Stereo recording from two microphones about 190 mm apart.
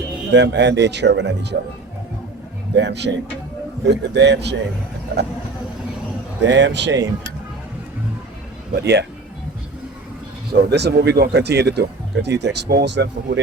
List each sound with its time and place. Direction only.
0.3 s speech: 65° right (ahead or behind)
2.7 s speech: 65° right (ahead or behind)
6.4 s speech: 70° right (ahead or behind)
8.7 s speech: 60° right (ahead or behind)
10.5 s speech: 60° right (ahead or behind)